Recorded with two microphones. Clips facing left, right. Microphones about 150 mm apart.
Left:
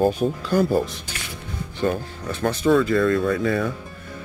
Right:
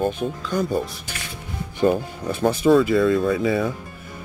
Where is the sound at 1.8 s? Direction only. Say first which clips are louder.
Right 4 dB; 15° right (ahead or behind).